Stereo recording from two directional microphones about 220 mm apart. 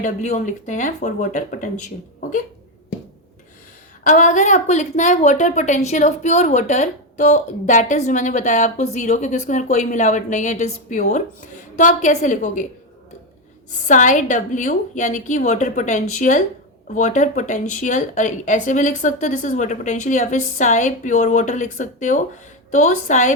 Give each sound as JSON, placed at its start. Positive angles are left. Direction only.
{"t": 0.0, "sound": "a woman's voice", "side_deg": 35}
{"t": 4.0, "sound": "a woman's voice", "side_deg": 35}
{"t": 13.8, "sound": "a woman's voice", "side_deg": 35}